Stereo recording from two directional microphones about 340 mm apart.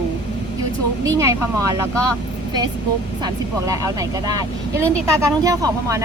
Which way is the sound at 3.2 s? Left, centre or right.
Centre.